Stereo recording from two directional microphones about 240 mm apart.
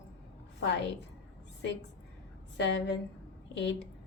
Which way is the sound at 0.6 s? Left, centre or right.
Left.